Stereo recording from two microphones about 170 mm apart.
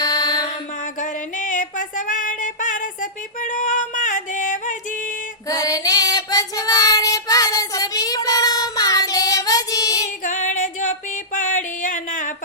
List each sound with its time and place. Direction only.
0.0 s mantra: 25° left (ahead or behind)
0.9 s music: 50° left (ahead or behind)
5.5 s child singing: 20° left (ahead or behind)
10.2 s female singing: 50° left (ahead or behind)
11.3 s music: 50° left (ahead or behind)